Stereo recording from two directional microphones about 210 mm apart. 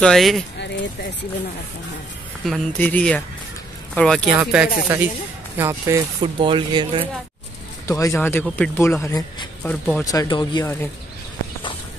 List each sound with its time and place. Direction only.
0.0 s speech: centre (ahead or behind)
2.4 s speech: 5° left (ahead or behind); by 7.1 s 25° right (ahead or behind)
7.8 s speech: 15° left (ahead or behind)